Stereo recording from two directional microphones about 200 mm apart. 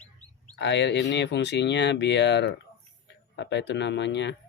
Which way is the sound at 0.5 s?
60° left (ahead or behind).